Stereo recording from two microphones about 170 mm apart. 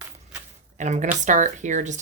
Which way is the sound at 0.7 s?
45° right (ahead or behind).